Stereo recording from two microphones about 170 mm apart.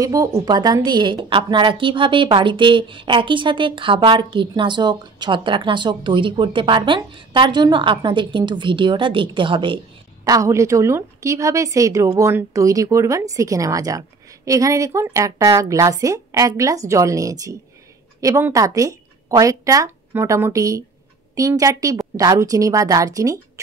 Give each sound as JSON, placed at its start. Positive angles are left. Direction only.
{"t": 0.0, "sound": "a woman's voice", "side_deg": -20}
{"t": 10.2, "sound": "a woman's voice", "side_deg": -20}